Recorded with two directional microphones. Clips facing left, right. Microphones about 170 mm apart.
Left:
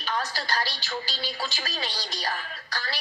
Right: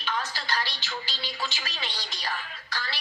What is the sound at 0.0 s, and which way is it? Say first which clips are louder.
A woman's voice: left 2 dB; 40° left (ahead or behind).